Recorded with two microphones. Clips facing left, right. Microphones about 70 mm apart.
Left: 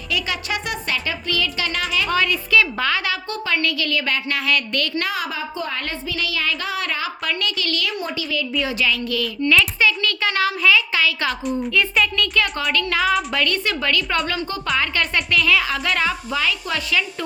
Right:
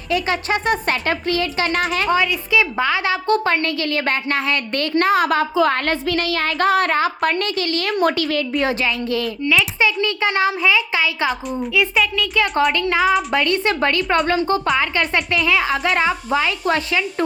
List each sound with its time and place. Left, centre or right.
0.1 s a woman's voice: right
2.0 s speech: centre
3.2 s a woman's voice: right
7.9 s a woman's voice: right
9.4 s speech: centre
10.0 s speech: right
11.3 s a woman's voice: centre
12.7 s a woman's voice: right
14.8 s speech: right